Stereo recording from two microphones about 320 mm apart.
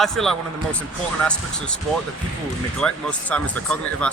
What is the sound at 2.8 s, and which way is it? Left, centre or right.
Speech, centre.